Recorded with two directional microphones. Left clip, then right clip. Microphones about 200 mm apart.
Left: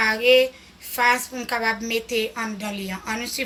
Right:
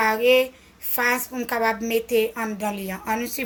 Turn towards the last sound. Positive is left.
turn(degrees=-45)  # may be behind; listen again after turning